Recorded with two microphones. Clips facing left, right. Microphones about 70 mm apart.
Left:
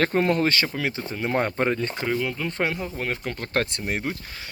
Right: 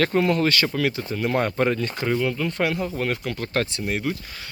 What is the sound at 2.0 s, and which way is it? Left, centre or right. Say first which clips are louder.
Speech: right 5 dB; centre.